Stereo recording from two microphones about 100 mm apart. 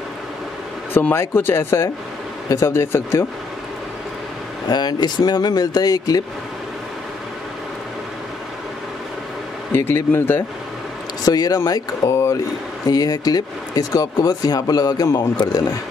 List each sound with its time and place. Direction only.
0.9 s speech: 25° left (ahead or behind)
4.6 s speech: 45° left (ahead or behind)
9.7 s speech: 25° left (ahead or behind)
11.2 s speech: 40° left (ahead or behind)
12.8 s speech: 40° left (ahead or behind)